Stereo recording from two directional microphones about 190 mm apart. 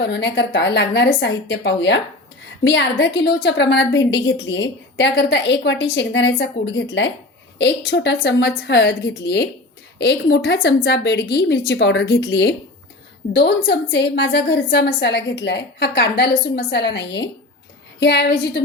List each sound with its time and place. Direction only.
0.0 s a woman's voice: 65° left (ahead or behind)